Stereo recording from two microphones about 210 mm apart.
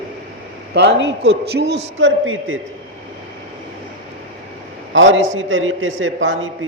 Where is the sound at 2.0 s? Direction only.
70° right (ahead or behind).